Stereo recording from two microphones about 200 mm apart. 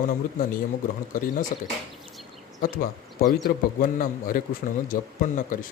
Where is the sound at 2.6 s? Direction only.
45° left (ahead or behind).